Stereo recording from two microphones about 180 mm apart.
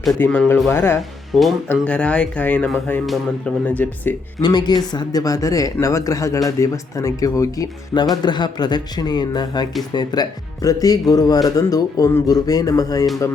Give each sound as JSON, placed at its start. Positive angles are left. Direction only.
{"t": 0.2, "sound": "speech", "side_deg": 10}
{"t": 1.3, "sound": "speech", "side_deg": 0}
{"t": 4.4, "sound": "speech", "side_deg": 25}